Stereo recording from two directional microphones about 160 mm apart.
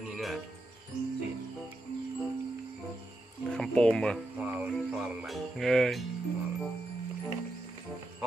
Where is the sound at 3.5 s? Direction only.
5° left (ahead or behind).